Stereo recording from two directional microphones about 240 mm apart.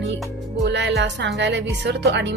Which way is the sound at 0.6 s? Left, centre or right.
Right.